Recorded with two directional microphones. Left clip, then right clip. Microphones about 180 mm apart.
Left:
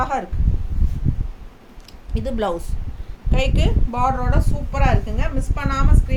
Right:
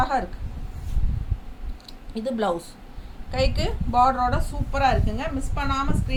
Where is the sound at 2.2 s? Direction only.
25° left (ahead or behind).